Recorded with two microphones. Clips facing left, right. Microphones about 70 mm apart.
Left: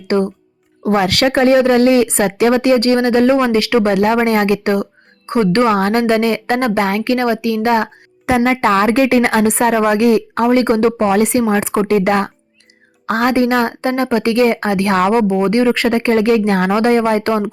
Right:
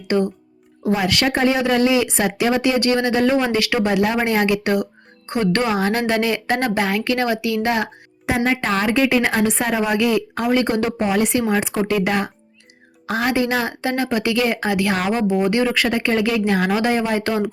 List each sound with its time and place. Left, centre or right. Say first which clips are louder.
0.9 s speech: left 5 dB; left
3.8 s speech: left 5 dB; left
5.7 s a woman's voice: left 5 dB; left
8.4 s a woman's voice: left 7 dB; left
13.6 s a woman's voice: left 6 dB; left
15.3 s a woman's voice: left 5 dB; left